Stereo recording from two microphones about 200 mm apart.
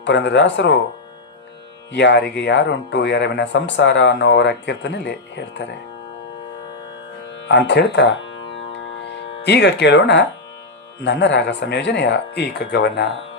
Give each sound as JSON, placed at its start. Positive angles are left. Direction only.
{"t": 0.0, "sound": "speech", "side_deg": 65}
{"t": 1.9, "sound": "speech", "side_deg": 60}
{"t": 7.4, "sound": "music", "side_deg": 60}
{"t": 11.0, "sound": "speech", "side_deg": 60}